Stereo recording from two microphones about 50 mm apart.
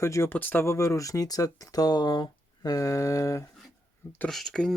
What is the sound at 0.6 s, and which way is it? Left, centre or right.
Speech, left.